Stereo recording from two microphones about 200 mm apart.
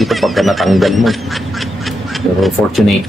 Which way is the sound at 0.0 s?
Centre (ahead or behind).